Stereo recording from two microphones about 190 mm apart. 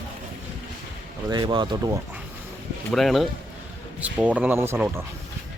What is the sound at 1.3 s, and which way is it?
Speech, 25° right (ahead or behind).